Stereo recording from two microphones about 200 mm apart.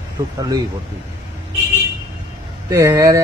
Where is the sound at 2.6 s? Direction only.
15° right (ahead or behind).